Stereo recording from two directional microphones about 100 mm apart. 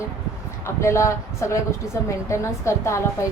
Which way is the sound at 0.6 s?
30° left (ahead or behind).